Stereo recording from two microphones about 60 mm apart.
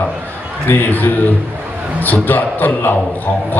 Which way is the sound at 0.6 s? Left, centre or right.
Left.